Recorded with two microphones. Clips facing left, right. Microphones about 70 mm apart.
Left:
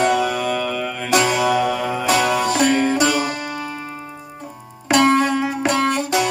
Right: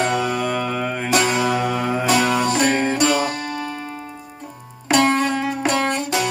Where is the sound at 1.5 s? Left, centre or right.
Right.